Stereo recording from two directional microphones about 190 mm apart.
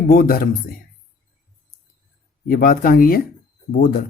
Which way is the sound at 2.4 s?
50° left (ahead or behind).